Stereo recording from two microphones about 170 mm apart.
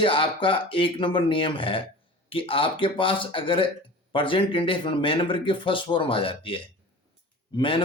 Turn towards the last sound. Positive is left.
turn(degrees=30)  # may be behind; listen again after turning